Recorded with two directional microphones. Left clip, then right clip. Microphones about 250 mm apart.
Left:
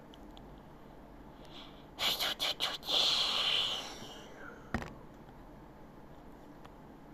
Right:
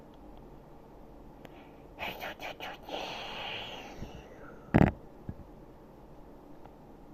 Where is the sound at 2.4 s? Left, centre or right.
Centre.